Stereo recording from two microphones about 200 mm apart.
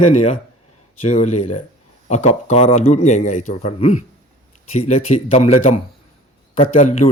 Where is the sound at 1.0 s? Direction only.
35° left (ahead or behind).